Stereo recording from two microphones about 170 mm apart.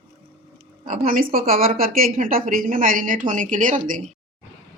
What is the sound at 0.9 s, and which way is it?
A woman's voice, 55° right (ahead or behind).